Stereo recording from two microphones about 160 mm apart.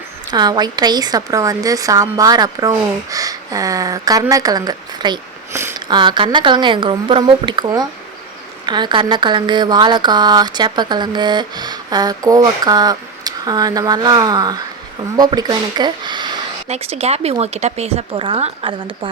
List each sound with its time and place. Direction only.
0.3 s speech: 25° right (ahead or behind)
16.6 s speech: 40° right (ahead or behind)